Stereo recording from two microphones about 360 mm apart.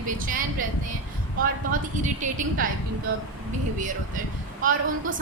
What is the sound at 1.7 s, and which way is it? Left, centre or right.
Speech, right.